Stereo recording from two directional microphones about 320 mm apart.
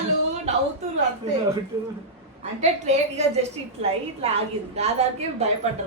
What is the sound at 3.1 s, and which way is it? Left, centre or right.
A woman's voice, centre.